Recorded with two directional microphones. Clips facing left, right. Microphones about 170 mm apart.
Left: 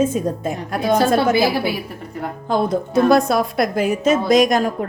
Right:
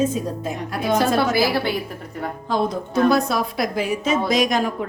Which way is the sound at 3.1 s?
50° left (ahead or behind).